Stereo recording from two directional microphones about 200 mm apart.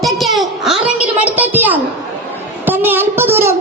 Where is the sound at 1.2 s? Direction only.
10° right (ahead or behind).